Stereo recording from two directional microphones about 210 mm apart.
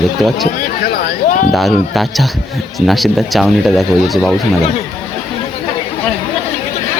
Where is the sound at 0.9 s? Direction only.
50° left (ahead or behind).